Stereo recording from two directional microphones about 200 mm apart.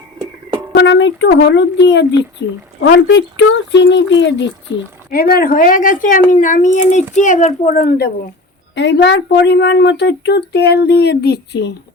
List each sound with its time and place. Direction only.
0.7 s a woman's voice: 60° left (ahead or behind)
5.1 s a woman's voice: 50° left (ahead or behind)
8.7 s a woman's voice: 60° left (ahead or behind)